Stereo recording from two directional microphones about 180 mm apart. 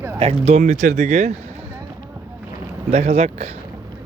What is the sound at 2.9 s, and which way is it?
Speech, 35° right (ahead or behind).